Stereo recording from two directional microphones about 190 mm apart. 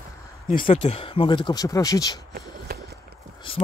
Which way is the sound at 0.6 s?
30° left (ahead or behind).